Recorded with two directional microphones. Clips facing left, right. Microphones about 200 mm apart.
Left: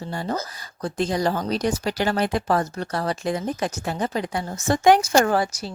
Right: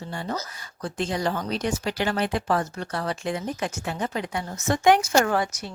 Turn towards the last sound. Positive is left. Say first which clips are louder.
# left 3 dB
turn(degrees=35)  # may be behind; listen again after turning